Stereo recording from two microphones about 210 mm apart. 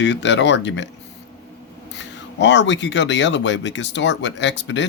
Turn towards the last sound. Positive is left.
turn(degrees=60)  # may be behind; listen again after turning